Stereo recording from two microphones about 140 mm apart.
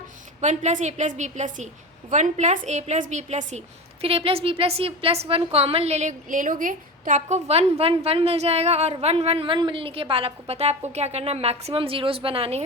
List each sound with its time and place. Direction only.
0.4 s a woman's voice: 60° right (ahead or behind)
4.0 s a woman's voice: 45° right (ahead or behind)